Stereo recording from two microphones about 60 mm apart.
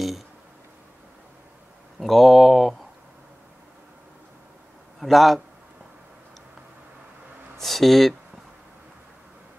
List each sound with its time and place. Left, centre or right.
2.0 s a sound: centre
5.0 s a man's voice: centre
7.5 s speech: centre